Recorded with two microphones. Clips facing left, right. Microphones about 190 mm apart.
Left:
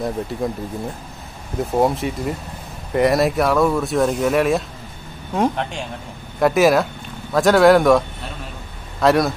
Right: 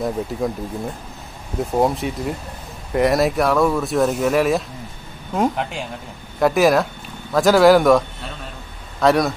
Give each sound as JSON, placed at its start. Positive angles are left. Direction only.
{"t": 0.0, "sound": "speech", "side_deg": 0}
{"t": 1.6, "sound": "speech", "side_deg": 0}
{"t": 9.0, "sound": "speech", "side_deg": 0}